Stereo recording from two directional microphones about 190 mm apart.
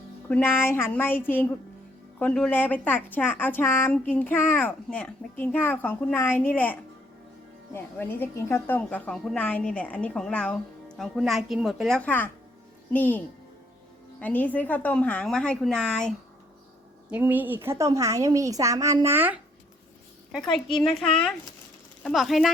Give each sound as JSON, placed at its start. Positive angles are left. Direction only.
{"t": 0.3, "sound": "a child's voice", "side_deg": 10}
{"t": 17.1, "sound": "a woman's voice", "side_deg": -10}
{"t": 20.3, "sound": "a woman's voice", "side_deg": 0}